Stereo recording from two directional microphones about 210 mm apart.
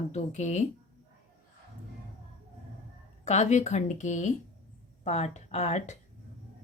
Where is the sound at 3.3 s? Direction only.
35° left (ahead or behind).